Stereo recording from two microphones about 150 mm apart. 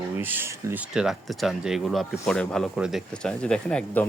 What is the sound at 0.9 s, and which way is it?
Speech, 5° right (ahead or behind).